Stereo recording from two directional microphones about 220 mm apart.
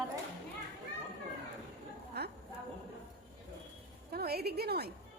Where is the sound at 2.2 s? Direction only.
45° right (ahead or behind).